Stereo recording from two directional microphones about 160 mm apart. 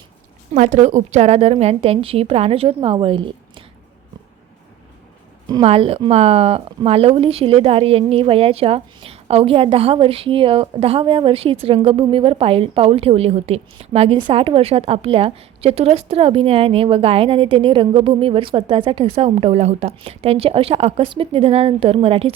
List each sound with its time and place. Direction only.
0.5 s a woman's voice: 45° right (ahead or behind)
5.5 s a woman's voice: 35° right (ahead or behind)